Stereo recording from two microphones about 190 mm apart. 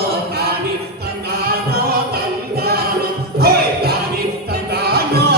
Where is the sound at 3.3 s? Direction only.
55° right (ahead or behind).